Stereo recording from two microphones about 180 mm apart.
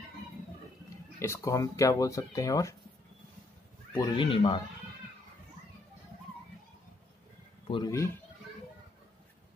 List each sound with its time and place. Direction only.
1.2 s speech: 15° left (ahead or behind)
3.9 s speech: 25° left (ahead or behind)
7.6 s speech: 25° left (ahead or behind)